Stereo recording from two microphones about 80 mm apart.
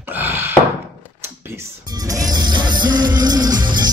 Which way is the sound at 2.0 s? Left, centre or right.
Right.